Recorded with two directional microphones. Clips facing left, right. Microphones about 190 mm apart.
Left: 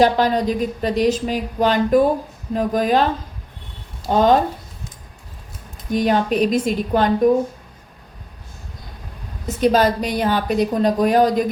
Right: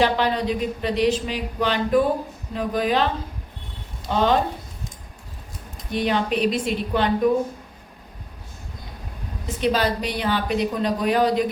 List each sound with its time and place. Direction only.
0.0 s speech: 45° left (ahead or behind)
4.1 s speech: 45° left (ahead or behind)
5.9 s speech: 45° left (ahead or behind)
9.6 s speech: 45° left (ahead or behind)